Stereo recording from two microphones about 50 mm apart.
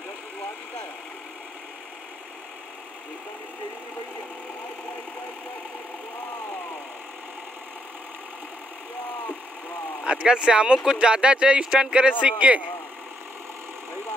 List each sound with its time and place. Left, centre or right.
10.0 s speech: right